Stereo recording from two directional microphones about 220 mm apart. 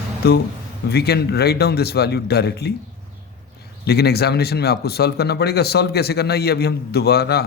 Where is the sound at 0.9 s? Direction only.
45° left (ahead or behind).